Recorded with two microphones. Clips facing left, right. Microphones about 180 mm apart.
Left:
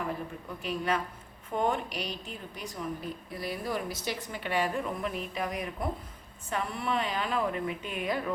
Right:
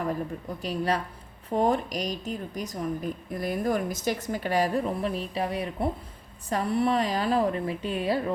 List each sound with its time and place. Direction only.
0.6 s a woman's voice: 35° right (ahead or behind)